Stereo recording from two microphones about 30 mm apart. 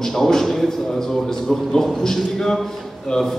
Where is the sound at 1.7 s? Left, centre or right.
Centre.